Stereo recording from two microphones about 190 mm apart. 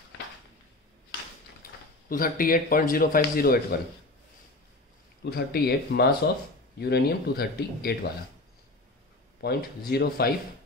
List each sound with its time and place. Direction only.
1.6 s speech: 50° left (ahead or behind)
5.2 s speech: 55° left (ahead or behind)
9.4 s speech: 55° left (ahead or behind)